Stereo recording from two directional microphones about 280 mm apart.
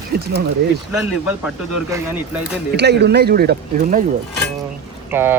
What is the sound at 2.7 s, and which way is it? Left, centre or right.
Speech, right.